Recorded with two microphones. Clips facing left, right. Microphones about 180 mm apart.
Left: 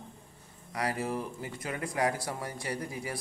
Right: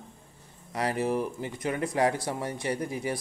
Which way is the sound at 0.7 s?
25° right (ahead or behind).